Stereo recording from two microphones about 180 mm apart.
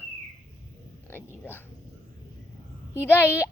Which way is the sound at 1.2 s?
10° left (ahead or behind).